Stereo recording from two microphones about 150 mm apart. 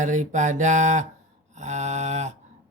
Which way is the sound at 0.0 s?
55° right (ahead or behind).